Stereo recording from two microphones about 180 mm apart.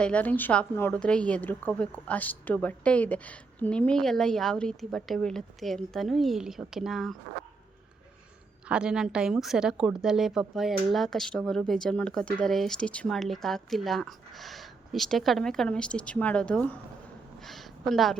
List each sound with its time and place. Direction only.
0.0 s a woman's voice: 5° left (ahead or behind)
8.7 s a woman's voice: 5° right (ahead or behind)
17.4 s a sound: centre (ahead or behind)